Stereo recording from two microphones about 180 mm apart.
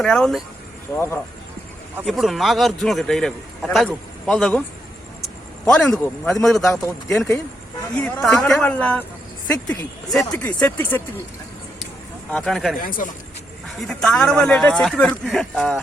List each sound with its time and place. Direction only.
0.0 s a man's voice: 5° left (ahead or behind)
0.9 s speech: 15° left (ahead or behind)
2.0 s a man's voice: centre (ahead or behind)
5.6 s a man's voice: 5° left (ahead or behind)
7.9 s a man's voice: 5° left (ahead or behind)
12.3 s a man's voice: 5° left (ahead or behind)
12.7 s speech: 50° left (ahead or behind)
13.7 s a man's voice: centre (ahead or behind)